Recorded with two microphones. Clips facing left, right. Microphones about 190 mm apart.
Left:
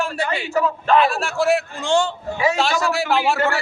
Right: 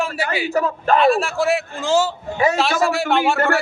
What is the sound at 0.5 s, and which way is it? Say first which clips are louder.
Speech: even; 40° right (ahead or behind).